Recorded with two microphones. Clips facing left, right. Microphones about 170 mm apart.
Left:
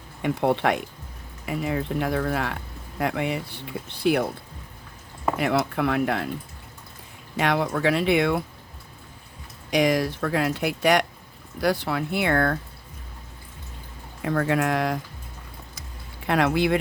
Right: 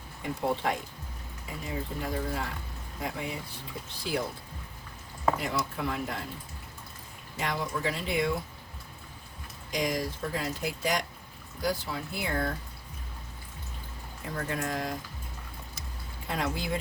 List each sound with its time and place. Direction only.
0.2 s speech: 70° left (ahead or behind)
5.4 s speech: 70° left (ahead or behind)
7.3 s speech: 70° left (ahead or behind)
9.6 s speech: 75° left (ahead or behind)
14.2 s speech: 70° left (ahead or behind)
16.2 s speech: 70° left (ahead or behind)